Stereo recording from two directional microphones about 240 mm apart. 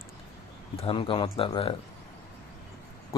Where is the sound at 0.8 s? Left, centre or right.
Left.